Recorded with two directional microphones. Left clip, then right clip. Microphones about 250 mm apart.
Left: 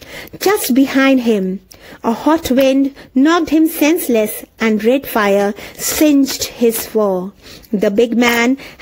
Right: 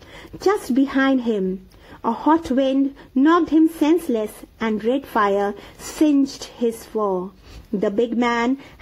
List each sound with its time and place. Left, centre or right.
0.5 s speech: left